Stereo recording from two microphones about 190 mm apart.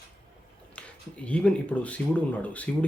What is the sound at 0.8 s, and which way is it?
Speech, 5° left (ahead or behind).